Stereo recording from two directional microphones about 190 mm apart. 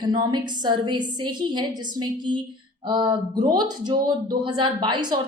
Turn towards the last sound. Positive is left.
turn(degrees=-25)  # may be behind; listen again after turning